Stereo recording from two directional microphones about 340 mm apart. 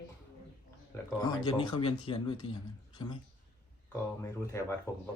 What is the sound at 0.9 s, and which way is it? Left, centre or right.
Speech, centre.